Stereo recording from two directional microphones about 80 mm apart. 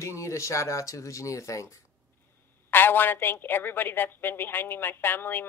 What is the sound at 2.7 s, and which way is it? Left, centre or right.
A woman's voice, left.